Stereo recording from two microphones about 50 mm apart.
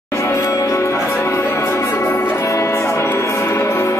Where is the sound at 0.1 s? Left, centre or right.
Left.